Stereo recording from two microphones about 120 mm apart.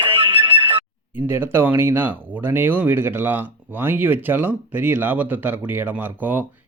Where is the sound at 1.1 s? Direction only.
20° right (ahead or behind).